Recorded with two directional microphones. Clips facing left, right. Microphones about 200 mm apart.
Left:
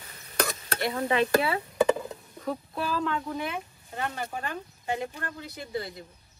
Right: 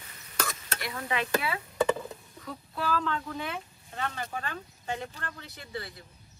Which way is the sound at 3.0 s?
15° left (ahead or behind).